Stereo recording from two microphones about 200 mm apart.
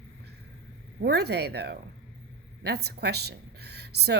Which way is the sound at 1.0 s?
55° right (ahead or behind).